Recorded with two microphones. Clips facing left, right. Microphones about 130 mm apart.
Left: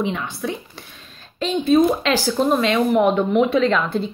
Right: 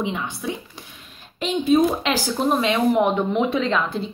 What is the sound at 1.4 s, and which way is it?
Speech, 15° right (ahead or behind).